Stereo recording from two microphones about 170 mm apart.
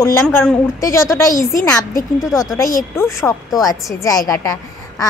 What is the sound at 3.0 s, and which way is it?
A woman's voice, 15° left (ahead or behind).